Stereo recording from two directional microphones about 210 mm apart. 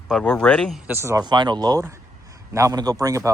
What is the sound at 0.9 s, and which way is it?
Speech, 10° right (ahead or behind).